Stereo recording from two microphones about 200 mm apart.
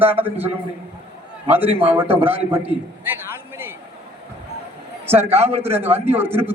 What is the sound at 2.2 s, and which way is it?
Speech, 10° right (ahead or behind).